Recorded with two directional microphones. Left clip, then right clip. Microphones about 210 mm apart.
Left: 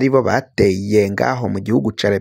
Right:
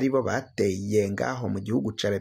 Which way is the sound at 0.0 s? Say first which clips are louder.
Left 10 dB; 40° left (ahead or behind).